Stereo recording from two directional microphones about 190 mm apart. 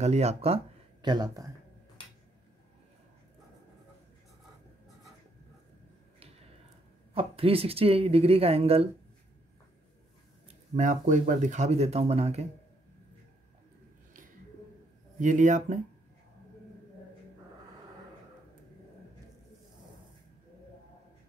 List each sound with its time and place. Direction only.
0.0 s speech: 35° right (ahead or behind)
1.0 s speech: 20° right (ahead or behind)
7.2 s speech: 30° right (ahead or behind)
10.5 s speech: 40° right (ahead or behind)
15.1 s speech: 40° right (ahead or behind)